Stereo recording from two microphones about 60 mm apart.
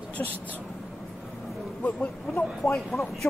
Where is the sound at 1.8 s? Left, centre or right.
Left.